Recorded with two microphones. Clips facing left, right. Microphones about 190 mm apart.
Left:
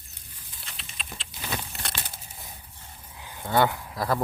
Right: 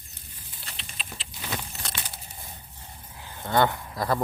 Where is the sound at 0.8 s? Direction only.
Centre (ahead or behind).